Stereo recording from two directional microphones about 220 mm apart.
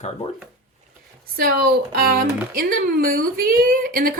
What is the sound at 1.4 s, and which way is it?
A woman's voice, 40° right (ahead or behind).